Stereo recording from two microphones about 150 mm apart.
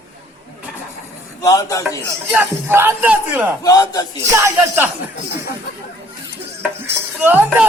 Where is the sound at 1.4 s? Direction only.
20° left (ahead or behind).